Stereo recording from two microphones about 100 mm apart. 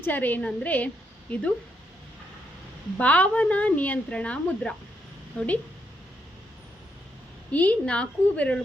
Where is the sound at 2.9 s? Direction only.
15° left (ahead or behind).